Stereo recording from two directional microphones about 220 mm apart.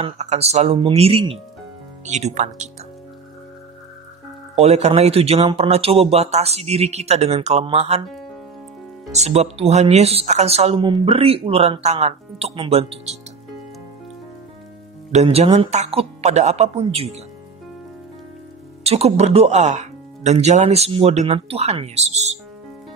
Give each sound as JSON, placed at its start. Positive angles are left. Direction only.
{"t": 0.0, "sound": "speech", "side_deg": -30}
{"t": 4.6, "sound": "speech", "side_deg": -30}
{"t": 9.1, "sound": "speech", "side_deg": -30}
{"t": 15.1, "sound": "speech", "side_deg": -25}
{"t": 18.9, "sound": "speech", "side_deg": -30}